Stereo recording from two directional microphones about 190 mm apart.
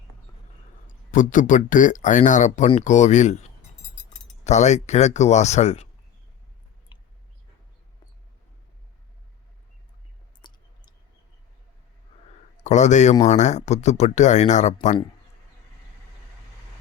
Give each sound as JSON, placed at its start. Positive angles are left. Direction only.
{"t": 1.1, "sound": "speech", "side_deg": 45}
{"t": 4.4, "sound": "speech", "side_deg": 40}
{"t": 10.4, "sound": "clicking", "side_deg": 20}
{"t": 12.6, "sound": "speech", "side_deg": 40}